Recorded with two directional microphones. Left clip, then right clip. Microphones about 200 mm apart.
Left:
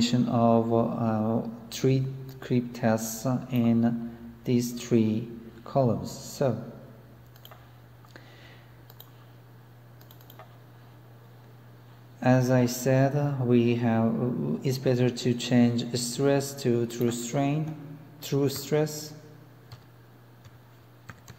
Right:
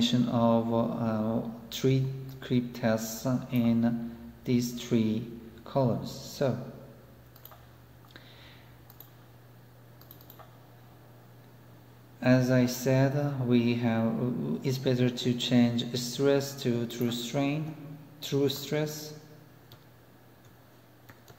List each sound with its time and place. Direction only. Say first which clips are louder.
0.0 s a man's voice: left 2 dB; 25° left (ahead or behind)
12.2 s a man's voice: left 2 dB; 30° left (ahead or behind)